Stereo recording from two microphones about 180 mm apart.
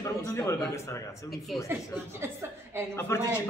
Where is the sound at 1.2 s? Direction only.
Centre (ahead or behind).